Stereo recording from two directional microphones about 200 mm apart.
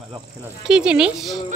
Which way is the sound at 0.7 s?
5° right (ahead or behind).